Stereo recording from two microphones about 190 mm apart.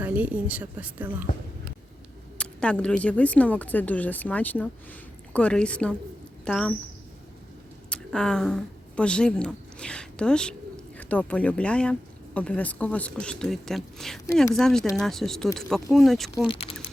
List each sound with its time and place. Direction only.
0.0 s a woman's voice: 10° right (ahead or behind)
2.4 s speech: 5° left (ahead or behind)
7.9 s speech: 5° left (ahead or behind)
16.5 s speech: 30° left (ahead or behind)